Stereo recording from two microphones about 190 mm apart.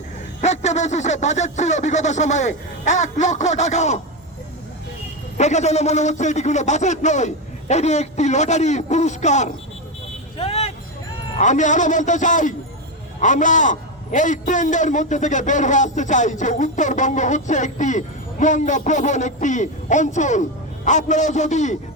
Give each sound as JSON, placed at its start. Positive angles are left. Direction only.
{"t": 0.4, "sound": "a man's voice", "side_deg": 35}
{"t": 5.4, "sound": "a man's voice", "side_deg": 35}
{"t": 10.3, "sound": "vehicle", "side_deg": 30}
{"t": 11.3, "sound": "a man's voice", "side_deg": 40}